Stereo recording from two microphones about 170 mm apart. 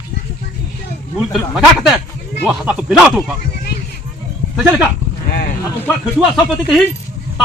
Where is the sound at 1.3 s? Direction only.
Centre (ahead or behind).